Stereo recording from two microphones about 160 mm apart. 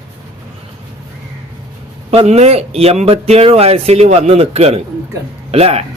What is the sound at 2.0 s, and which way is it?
Speech, 40° right (ahead or behind).